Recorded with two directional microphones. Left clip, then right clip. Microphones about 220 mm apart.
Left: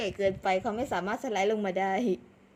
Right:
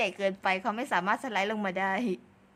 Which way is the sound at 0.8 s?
60° right (ahead or behind).